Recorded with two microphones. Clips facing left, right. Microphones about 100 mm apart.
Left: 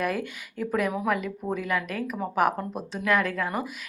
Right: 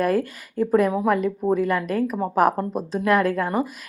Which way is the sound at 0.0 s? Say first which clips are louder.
Right 7 dB; 35° right (ahead or behind).